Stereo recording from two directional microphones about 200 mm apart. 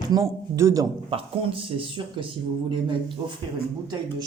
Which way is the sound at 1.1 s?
25° right (ahead or behind).